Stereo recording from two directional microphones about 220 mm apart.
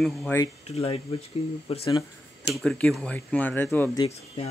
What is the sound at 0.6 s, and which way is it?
Speech, 25° left (ahead or behind).